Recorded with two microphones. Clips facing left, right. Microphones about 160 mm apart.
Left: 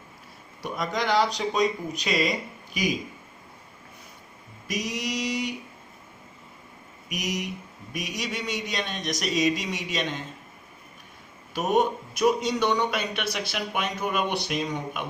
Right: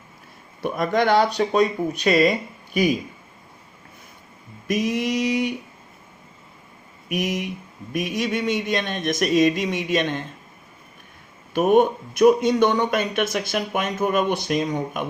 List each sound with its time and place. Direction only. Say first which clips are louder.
0.6 s speech: right 8 dB; 55° right (ahead or behind)
4.7 s speech: right 8 dB; 55° right (ahead or behind)
7.1 s speech: right 6 dB; 55° right (ahead or behind)
11.5 s speech: right 7 dB; 55° right (ahead or behind)